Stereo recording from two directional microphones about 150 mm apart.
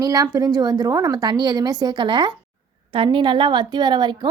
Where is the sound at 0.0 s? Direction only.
25° right (ahead or behind).